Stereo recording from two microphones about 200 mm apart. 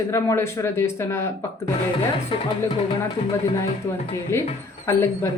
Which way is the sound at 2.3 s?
25° left (ahead or behind).